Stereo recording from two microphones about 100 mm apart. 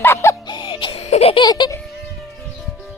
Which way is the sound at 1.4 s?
50° left (ahead or behind).